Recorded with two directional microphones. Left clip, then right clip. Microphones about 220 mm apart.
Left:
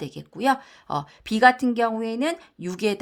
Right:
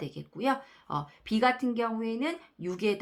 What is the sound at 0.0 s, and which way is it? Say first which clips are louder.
Speech: left 7 dB; 45° left (ahead or behind).